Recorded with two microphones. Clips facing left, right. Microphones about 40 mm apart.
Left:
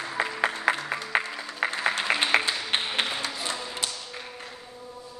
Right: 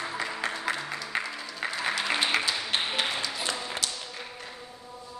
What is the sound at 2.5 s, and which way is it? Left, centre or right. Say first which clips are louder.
Music: left 1 dB; left.